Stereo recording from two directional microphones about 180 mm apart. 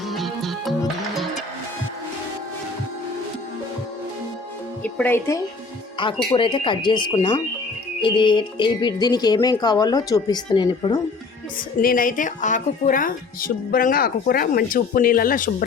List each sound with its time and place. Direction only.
0.0 s music: centre (ahead or behind)
4.8 s speech: 10° left (ahead or behind)
6.0 s speech: 25° left (ahead or behind)
11.8 s speech: 50° left (ahead or behind)